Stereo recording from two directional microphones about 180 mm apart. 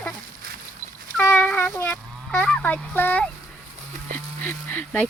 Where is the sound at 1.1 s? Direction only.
10° left (ahead or behind).